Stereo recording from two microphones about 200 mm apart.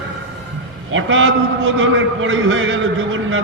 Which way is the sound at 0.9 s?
75° right (ahead or behind).